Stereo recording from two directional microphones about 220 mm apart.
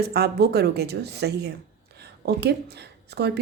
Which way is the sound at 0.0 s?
45° right (ahead or behind).